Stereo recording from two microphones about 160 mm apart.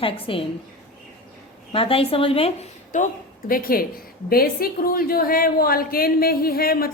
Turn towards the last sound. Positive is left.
turn(degrees=70)  # may be behind; listen again after turning